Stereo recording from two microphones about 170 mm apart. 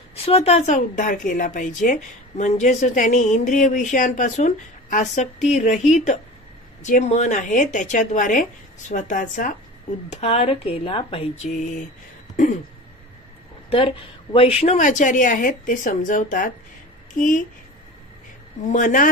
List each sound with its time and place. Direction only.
0.2 s a woman's voice: 35° left (ahead or behind)
13.7 s a woman's voice: 30° left (ahead or behind); by 16.5 s 50° left (ahead or behind)
18.7 s a woman's voice: 50° left (ahead or behind)